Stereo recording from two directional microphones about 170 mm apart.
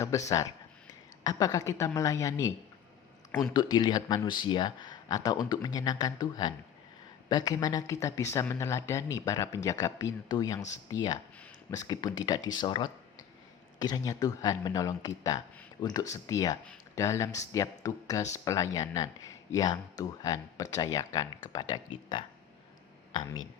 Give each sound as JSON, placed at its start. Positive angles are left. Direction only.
{"t": 0.1, "sound": "speech", "side_deg": 20}
{"t": 3.5, "sound": "speech", "side_deg": 25}